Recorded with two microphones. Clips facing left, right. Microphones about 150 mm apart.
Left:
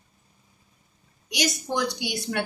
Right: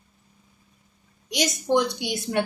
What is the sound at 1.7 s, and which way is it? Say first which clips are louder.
Speech: right 5 dB; 25° right (ahead or behind).